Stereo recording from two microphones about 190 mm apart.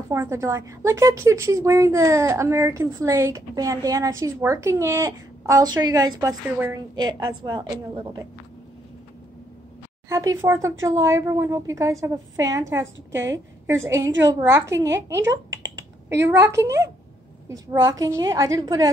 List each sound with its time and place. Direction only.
0.1 s a woman's voice: 15° right (ahead or behind)
10.0 s a woman's voice: 15° right (ahead or behind)
15.2 s typing: 85° right
16.2 s a woman's voice: 10° right (ahead or behind)